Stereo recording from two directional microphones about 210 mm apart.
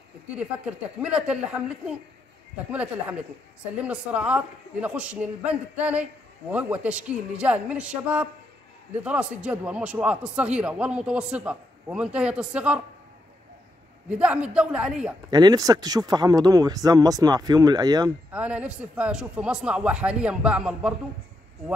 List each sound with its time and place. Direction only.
0.3 s a man's voice: 5° right (ahead or behind)
14.0 s a man's voice: 5° right (ahead or behind)
15.2 s speech: 20° right (ahead or behind)
18.3 s a man's voice: 5° right (ahead or behind)